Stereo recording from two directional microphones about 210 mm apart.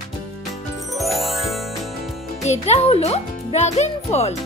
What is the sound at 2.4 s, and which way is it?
Speech, 30° left (ahead or behind).